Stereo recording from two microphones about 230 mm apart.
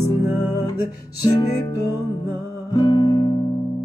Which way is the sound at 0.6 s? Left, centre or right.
Centre.